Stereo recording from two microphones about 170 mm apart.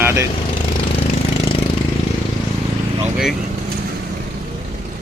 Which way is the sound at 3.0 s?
Centre (ahead or behind).